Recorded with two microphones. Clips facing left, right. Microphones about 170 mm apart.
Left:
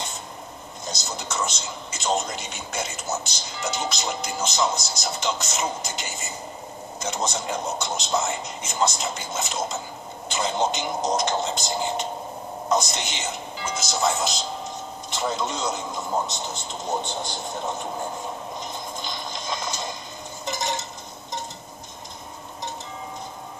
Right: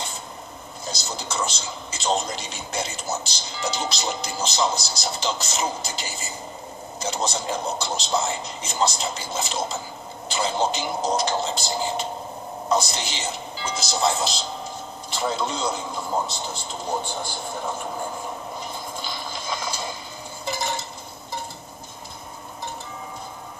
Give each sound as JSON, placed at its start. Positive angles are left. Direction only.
{"t": 0.8, "sound": "speech", "side_deg": -30}
{"t": 17.0, "sound": "a man's voice", "side_deg": 20}
{"t": 18.6, "sound": "a sound", "side_deg": -5}